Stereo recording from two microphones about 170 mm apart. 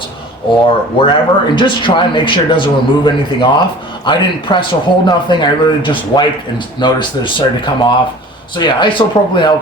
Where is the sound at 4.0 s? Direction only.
25° left (ahead or behind).